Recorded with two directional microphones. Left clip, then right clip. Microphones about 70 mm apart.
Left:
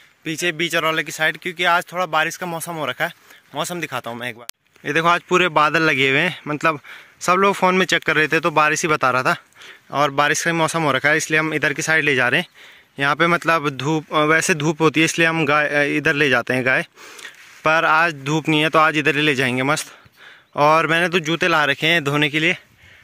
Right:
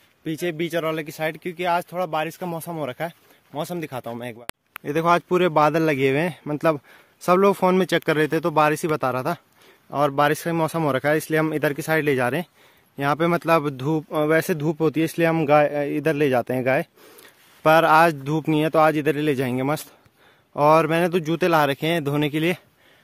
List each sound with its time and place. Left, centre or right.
0.2 s speech: right
8.9 s speech: centre
14.1 s speech: centre
17.6 s speech: right
18.2 s speech: centre
21.1 s speech: right